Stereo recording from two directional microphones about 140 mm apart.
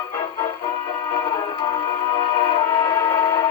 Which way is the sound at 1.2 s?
35° left (ahead or behind).